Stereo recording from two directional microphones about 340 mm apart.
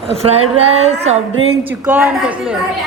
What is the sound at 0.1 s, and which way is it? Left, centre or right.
A woman's voice, centre.